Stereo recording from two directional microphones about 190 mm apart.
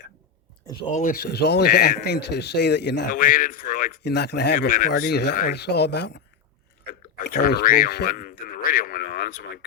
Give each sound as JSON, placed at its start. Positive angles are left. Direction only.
{"t": 0.9, "sound": "speech", "side_deg": 45}
{"t": 3.1, "sound": "speech", "side_deg": 45}
{"t": 4.5, "sound": "speech", "side_deg": 45}
{"t": 7.3, "sound": "speech", "side_deg": 60}